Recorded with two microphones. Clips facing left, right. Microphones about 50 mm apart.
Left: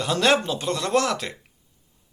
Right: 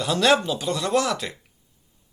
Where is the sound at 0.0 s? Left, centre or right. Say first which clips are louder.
Right 1 dB; left.